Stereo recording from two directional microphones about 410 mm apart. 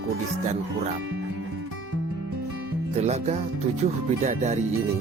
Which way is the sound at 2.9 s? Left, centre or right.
Centre.